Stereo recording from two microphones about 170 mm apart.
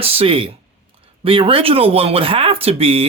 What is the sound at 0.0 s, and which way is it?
Speech, 35° right (ahead or behind).